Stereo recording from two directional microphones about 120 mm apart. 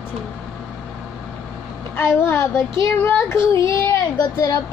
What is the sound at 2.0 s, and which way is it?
Child singing, 20° left (ahead or behind).